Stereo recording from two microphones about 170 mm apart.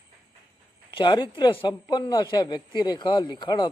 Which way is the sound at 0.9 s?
25° left (ahead or behind).